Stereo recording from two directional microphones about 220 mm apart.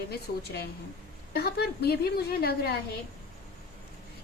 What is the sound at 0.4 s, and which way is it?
A woman's voice, 45° left (ahead or behind).